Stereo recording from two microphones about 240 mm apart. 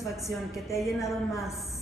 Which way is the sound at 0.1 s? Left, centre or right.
Centre.